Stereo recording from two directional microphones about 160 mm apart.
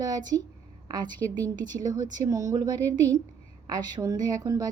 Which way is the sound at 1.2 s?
10° left (ahead or behind).